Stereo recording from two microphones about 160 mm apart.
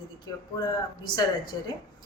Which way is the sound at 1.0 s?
25° left (ahead or behind).